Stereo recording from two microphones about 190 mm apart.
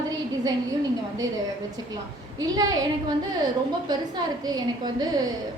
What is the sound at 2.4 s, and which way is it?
Speech, 20° right (ahead or behind).